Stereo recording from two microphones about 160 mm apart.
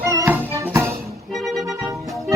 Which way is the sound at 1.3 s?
Centre (ahead or behind).